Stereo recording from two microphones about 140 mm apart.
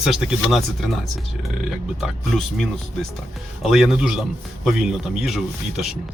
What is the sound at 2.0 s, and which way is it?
Speech, centre (ahead or behind).